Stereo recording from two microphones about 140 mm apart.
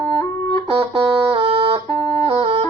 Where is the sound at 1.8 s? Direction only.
30° left (ahead or behind).